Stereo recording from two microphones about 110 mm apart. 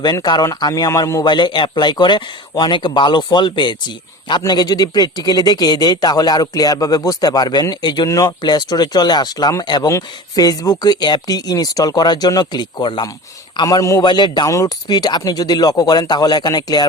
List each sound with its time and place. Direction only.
0.0 s speech: 40° left (ahead or behind)
1.2 s speech: 45° left (ahead or behind)
8.0 s speech: 30° left (ahead or behind)
8.4 s speech: 40° left (ahead or behind)
14.0 s speech: 40° left (ahead or behind)